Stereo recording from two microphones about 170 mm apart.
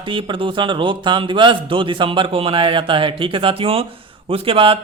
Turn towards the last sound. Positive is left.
turn(degrees=-30)  # may be behind; listen again after turning